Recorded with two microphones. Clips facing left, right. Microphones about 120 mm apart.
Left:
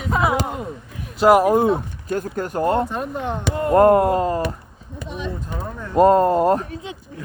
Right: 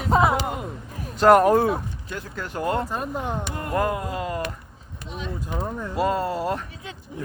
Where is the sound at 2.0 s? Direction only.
45° left (ahead or behind).